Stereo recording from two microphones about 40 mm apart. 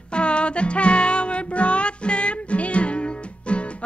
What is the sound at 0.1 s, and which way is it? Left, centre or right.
Music, left.